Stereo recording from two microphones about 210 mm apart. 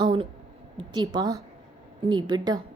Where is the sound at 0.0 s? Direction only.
25° right (ahead or behind).